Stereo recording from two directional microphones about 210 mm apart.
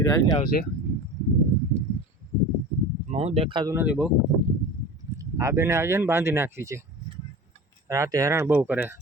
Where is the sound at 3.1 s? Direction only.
30° right (ahead or behind); by 4.1 s 5° right (ahead or behind).